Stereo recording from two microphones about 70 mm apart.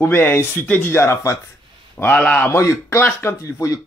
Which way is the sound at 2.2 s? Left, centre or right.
Centre.